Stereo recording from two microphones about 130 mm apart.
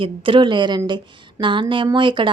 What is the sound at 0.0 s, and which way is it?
A woman's voice, 40° right (ahead or behind).